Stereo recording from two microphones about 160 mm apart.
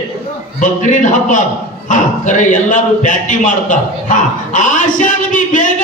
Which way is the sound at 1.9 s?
50° left (ahead or behind).